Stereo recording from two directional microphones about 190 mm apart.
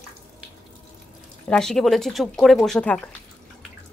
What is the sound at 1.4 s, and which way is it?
Speech, 5° left (ahead or behind).